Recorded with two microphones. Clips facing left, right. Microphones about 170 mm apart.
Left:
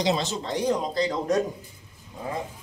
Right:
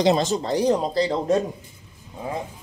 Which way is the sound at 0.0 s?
50° right (ahead or behind).